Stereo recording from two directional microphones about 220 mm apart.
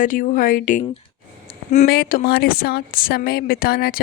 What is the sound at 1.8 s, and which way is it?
A woman's voice, 45° left (ahead or behind).